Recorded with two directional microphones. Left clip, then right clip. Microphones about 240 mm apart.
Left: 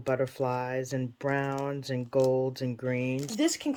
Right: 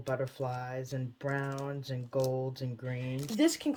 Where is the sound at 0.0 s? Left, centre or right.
Centre.